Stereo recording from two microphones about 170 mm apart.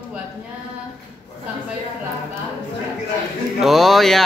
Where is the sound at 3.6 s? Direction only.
Centre (ahead or behind).